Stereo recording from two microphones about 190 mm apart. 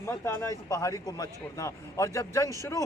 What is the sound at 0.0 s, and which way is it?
A man's voice, 15° left (ahead or behind).